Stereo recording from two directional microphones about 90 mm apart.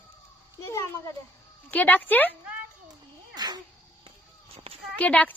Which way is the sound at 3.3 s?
50° right (ahead or behind).